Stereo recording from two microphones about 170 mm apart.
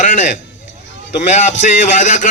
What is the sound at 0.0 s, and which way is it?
Speech, 50° left (ahead or behind).